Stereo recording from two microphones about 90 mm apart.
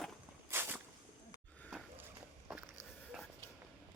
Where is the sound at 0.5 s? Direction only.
25° right (ahead or behind).